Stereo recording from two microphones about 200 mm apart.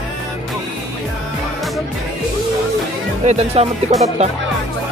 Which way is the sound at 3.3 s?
30° right (ahead or behind).